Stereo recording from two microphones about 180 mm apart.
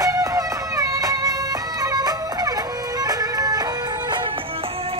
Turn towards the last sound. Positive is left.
turn(degrees=-20)  # may be behind; listen again after turning